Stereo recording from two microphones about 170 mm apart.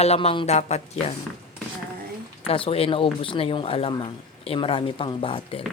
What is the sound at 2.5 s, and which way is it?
Speech, 35° left (ahead or behind).